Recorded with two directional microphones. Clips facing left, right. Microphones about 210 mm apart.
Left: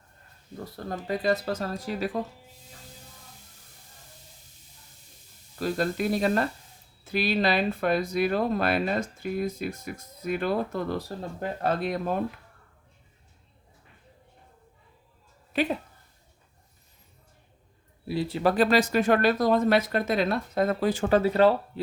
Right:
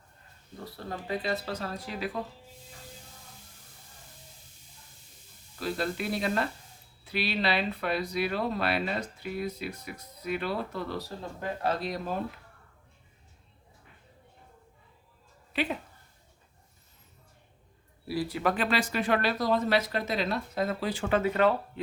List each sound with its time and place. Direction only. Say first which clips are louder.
0.9 s speech: left 5 dB; 45° left (ahead or behind)
5.5 s speech: left 4 dB; 45° left (ahead or behind)
15.5 s speech: left 5 dB; 45° left (ahead or behind)
18.1 s speech: left 4 dB; 25° left (ahead or behind)